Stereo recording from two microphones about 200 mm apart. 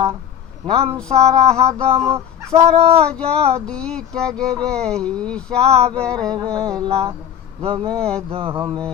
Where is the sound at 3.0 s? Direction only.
5° left (ahead or behind).